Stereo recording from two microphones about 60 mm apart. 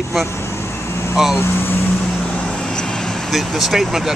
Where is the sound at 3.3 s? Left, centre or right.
Centre.